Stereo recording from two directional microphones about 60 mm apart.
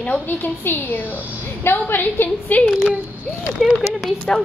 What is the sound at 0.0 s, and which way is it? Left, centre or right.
A woman's voice, left.